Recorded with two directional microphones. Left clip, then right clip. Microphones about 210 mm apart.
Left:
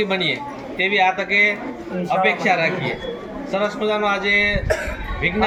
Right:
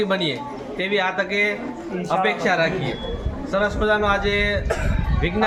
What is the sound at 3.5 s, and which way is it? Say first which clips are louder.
Speech: right 1 dB; 20° right (ahead or behind).